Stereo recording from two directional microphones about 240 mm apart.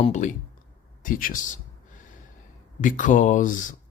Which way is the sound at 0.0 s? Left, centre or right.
Left.